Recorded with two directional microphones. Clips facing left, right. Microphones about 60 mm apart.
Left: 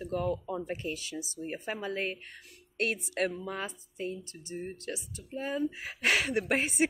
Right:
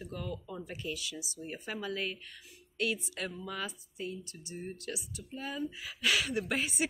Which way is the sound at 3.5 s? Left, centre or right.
Left.